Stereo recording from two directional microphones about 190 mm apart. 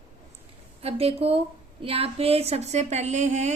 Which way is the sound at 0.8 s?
30° right (ahead or behind).